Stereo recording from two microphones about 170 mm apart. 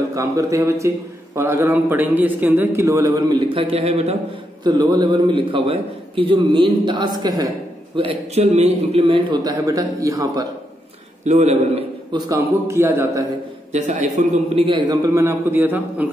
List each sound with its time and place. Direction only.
0.1 s a man's voice: 20° right (ahead or behind); by 4.2 s 40° right (ahead or behind)
4.6 s a man's voice: 25° right (ahead or behind)
11.2 s a man's voice: 40° right (ahead or behind)
12.1 s a man's voice: 20° right (ahead or behind)
13.7 s a man's voice: 45° right (ahead or behind); by 16.1 s 10° right (ahead or behind)